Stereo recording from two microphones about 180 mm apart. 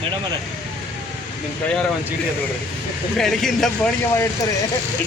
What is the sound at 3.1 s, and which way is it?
Speech, centre (ahead or behind).